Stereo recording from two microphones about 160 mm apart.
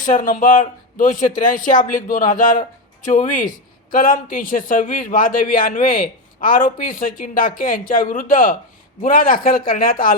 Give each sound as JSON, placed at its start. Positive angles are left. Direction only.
{"t": 0.0, "sound": "a man's voice", "side_deg": 55}